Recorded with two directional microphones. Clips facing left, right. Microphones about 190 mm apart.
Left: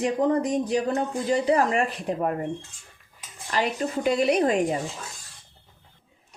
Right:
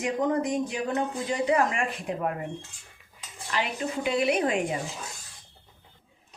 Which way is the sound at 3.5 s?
40° left (ahead or behind).